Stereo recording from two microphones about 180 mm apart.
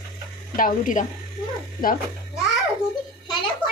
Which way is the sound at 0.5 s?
50° left (ahead or behind).